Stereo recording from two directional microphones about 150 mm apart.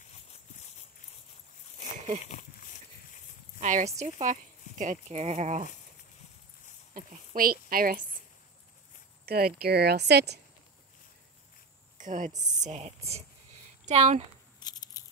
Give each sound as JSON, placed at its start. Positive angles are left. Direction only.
{"t": 2.2, "sound": "a sound", "side_deg": 55}
{"t": 3.5, "sound": "speech", "side_deg": -50}
{"t": 6.9, "sound": "a woman's voice", "side_deg": -60}
{"t": 9.2, "sound": "speech", "side_deg": -90}
{"t": 12.0, "sound": "speech", "side_deg": -60}
{"t": 12.4, "sound": "speech", "side_deg": -25}
{"t": 12.6, "sound": "speech", "side_deg": -45}
{"t": 14.6, "sound": "a sound", "side_deg": 25}